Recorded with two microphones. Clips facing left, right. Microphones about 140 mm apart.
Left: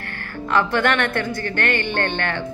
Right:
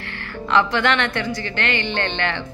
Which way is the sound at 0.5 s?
50° left (ahead or behind).